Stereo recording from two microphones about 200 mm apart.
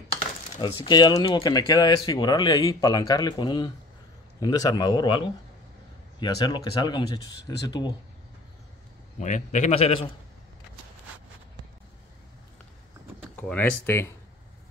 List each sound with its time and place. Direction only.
0.1 s speech: 25° left (ahead or behind)
9.2 s a man's voice: 35° left (ahead or behind)
13.4 s speech: 10° left (ahead or behind)